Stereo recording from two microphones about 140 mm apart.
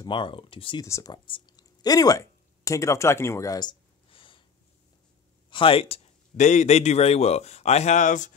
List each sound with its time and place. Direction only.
0.0 s speech: 35° left (ahead or behind)
0.8 s speech: 20° left (ahead or behind)
1.1 s speech: 35° left (ahead or behind)
5.5 s a man's voice: 40° left (ahead or behind); by 8.3 s 65° left (ahead or behind)